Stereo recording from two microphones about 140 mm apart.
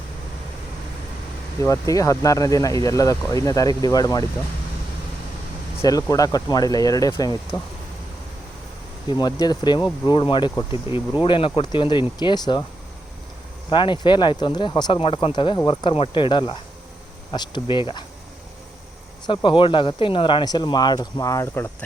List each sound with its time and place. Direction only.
1.6 s speech: 25° left (ahead or behind)
5.8 s speech: 25° left (ahead or behind)
9.1 s speech: 30° left (ahead or behind)
10.8 s speech: 20° right (ahead or behind)
11.2 s speech: 35° left (ahead or behind)
13.7 s speech: 35° left (ahead or behind)
19.2 s speech: 35° left (ahead or behind); by 21.8 s 15° left (ahead or behind)